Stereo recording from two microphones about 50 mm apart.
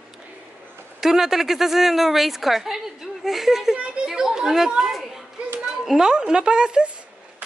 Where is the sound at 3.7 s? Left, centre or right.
Right.